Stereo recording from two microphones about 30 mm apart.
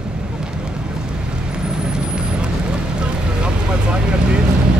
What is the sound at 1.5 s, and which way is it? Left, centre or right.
Vehicle, right.